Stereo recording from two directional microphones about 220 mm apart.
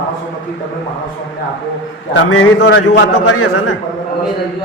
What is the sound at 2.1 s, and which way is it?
A man's voice, 60° left (ahead or behind).